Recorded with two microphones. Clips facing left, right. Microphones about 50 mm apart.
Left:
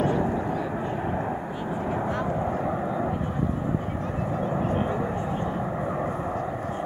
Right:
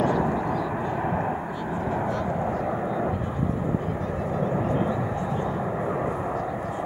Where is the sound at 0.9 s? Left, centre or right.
Centre.